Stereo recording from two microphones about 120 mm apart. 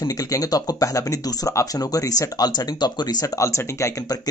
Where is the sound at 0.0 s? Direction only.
30° left (ahead or behind).